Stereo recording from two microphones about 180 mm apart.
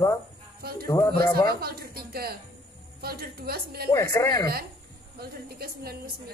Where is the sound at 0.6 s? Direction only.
55° right (ahead or behind).